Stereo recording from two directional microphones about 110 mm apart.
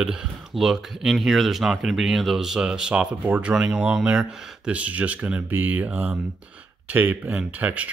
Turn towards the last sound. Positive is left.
turn(degrees=-15)  # may be behind; listen again after turning